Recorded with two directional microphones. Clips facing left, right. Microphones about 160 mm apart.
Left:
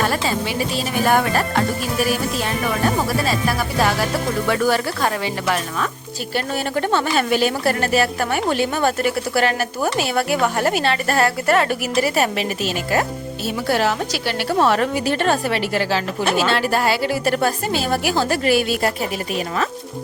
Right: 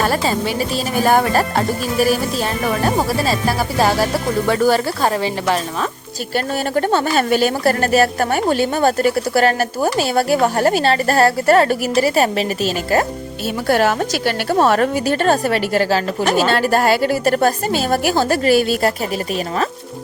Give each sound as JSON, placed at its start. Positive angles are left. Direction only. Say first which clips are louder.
{"t": 0.0, "sound": "music", "louder": "right 3 dB", "side_deg": -35}
{"t": 1.0, "sound": "a woman's voice", "louder": "right 3 dB", "side_deg": -35}
{"t": 3.2, "sound": "a woman's voice", "louder": "right 2 dB", "side_deg": -30}
{"t": 6.3, "sound": "a woman's voice", "louder": "right 3 dB", "side_deg": -40}
{"t": 13.7, "sound": "a woman's voice", "louder": "right 4 dB", "side_deg": -50}